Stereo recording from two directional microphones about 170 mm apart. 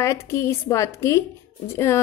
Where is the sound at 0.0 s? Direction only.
15° left (ahead or behind).